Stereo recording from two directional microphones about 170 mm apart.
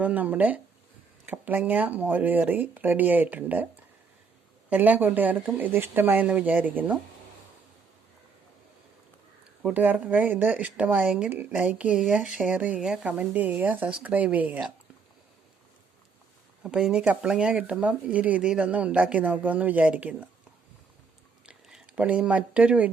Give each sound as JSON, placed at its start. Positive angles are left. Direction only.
{"t": 0.0, "sound": "speech", "side_deg": -10}
{"t": 4.7, "sound": "speech", "side_deg": -10}
{"t": 9.6, "sound": "speech", "side_deg": -10}
{"t": 16.6, "sound": "speech", "side_deg": -5}
{"t": 21.4, "sound": "a sound", "side_deg": -5}